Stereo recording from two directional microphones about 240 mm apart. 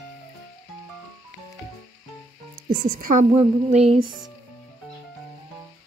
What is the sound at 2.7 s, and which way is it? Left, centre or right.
Speech, right.